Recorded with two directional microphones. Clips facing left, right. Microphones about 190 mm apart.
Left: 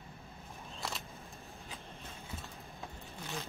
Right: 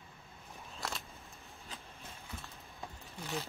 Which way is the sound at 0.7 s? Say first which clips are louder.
Even; centre (ahead or behind).